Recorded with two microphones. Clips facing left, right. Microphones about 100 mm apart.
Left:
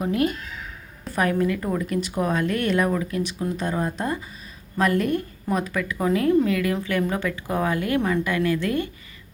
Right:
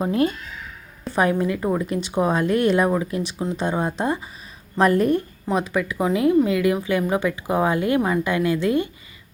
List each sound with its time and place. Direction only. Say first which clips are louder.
0.0 s a woman's voice: right 2 dB; 30° right (ahead or behind)